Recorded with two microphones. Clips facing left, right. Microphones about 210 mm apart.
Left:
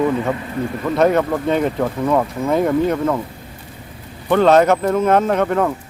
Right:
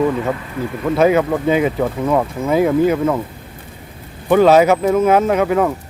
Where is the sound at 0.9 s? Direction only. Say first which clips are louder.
Right 2 dB; 5° right (ahead or behind).